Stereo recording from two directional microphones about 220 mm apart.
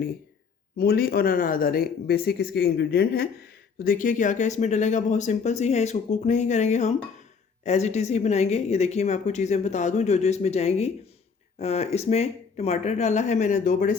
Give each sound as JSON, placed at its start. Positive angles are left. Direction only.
{"t": 0.8, "sound": "a woman's voice", "side_deg": 45}